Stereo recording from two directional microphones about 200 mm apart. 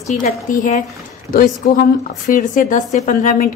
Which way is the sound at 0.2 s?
40° left (ahead or behind).